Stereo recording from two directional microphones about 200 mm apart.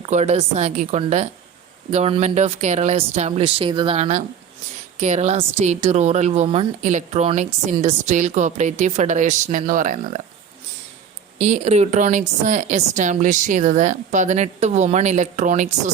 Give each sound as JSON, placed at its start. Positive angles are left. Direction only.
{"t": 0.0, "sound": "speech", "side_deg": -35}
{"t": 11.3, "sound": "speech", "side_deg": -35}